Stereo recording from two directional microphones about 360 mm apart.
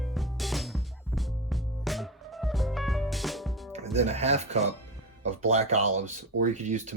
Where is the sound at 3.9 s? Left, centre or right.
Centre.